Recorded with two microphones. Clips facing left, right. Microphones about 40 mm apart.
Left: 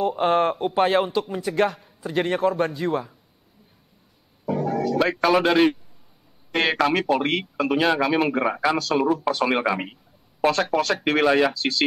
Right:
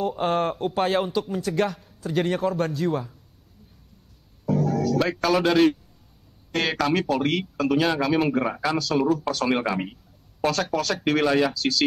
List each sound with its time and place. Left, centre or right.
0.1 s speech: centre
4.5 s speech: centre